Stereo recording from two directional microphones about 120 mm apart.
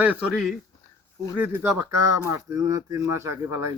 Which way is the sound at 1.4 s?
20° right (ahead or behind).